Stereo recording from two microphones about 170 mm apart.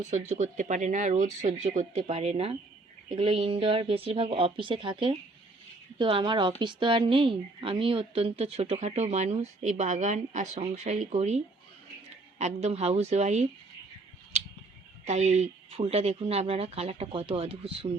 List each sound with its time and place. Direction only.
0.0 s a woman's voice: 45° right (ahead or behind)
15.0 s a woman's voice: 40° right (ahead or behind)